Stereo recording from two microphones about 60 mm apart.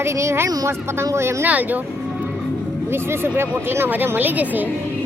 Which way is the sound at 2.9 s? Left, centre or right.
Right.